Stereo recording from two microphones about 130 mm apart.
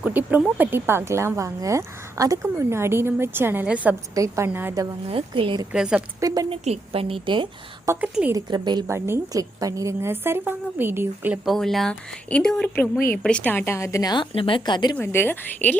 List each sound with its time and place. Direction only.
0.0 s speech: 15° right (ahead or behind)
4.1 s a woman's voice: 25° right (ahead or behind)
5.1 s speech: 40° right (ahead or behind)
5.7 s speech: 5° right (ahead or behind)
6.1 s a woman's voice: 30° right (ahead or behind)
6.5 s a woman's voice: 45° right (ahead or behind)
8.0 s speech: 10° right (ahead or behind)
8.3 s speech: 30° right (ahead or behind)
8.9 s a woman's voice: 20° right (ahead or behind)
11.4 s speech: centre (ahead or behind)
12.7 s a woman's voice: 15° left (ahead or behind); by 14.9 s 35° left (ahead or behind)
14.9 s a woman's voice: 15° left (ahead or behind)